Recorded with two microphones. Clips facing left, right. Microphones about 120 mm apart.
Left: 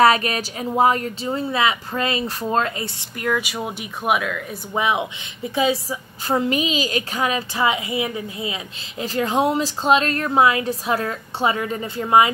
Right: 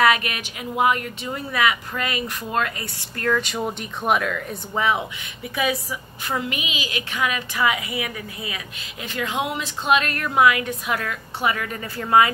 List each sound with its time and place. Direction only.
0.0 s speech: 35° left (ahead or behind)
3.2 s speech: 10° left (ahead or behind)
4.7 s speech: 15° left (ahead or behind)
5.5 s a woman's voice: 25° left (ahead or behind)
9.0 s speech: 35° left (ahead or behind); by 12.3 s 20° left (ahead or behind)